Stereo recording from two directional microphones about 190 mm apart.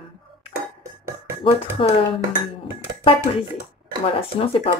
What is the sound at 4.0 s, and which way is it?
Speech, 30° left (ahead or behind).